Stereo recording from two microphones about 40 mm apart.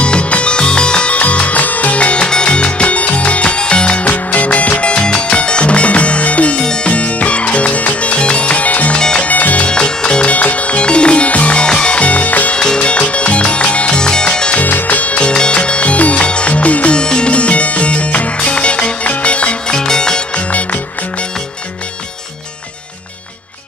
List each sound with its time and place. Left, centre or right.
0.0 s music: left
1.1 s music: left
2.2 s music: left
6.6 s music: centre
6.9 s music: left
8.9 s music: left
9.3 s music: left
9.7 s music: left
10.2 s music: left
11.6 s music: left
12.5 s music: left
14.6 s music: left
16.9 s music: left
19.8 s music: centre